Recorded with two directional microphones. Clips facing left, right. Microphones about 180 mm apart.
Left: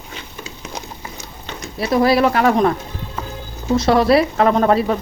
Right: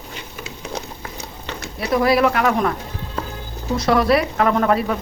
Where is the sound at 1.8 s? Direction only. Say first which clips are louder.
Left 2 dB; 30° left (ahead or behind).